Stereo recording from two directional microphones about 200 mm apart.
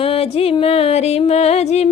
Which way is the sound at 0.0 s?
30° left (ahead or behind).